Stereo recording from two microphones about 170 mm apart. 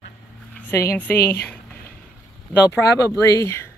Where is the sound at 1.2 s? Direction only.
65° left (ahead or behind).